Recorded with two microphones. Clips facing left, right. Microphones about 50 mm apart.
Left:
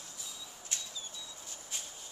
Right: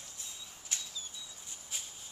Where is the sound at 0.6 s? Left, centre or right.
Centre.